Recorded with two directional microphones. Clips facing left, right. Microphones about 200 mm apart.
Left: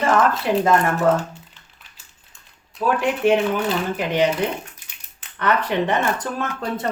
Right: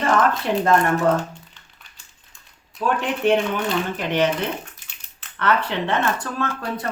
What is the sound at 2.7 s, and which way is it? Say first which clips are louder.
Speech: left 2 dB; 5° left (ahead or behind).